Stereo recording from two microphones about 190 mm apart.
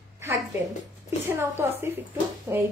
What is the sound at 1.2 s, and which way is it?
A woman's voice, 10° right (ahead or behind).